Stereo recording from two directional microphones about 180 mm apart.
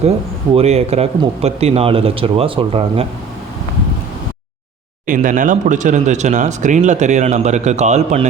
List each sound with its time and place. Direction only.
0.5 s speech: 35° right (ahead or behind)
5.0 s speech: 45° right (ahead or behind)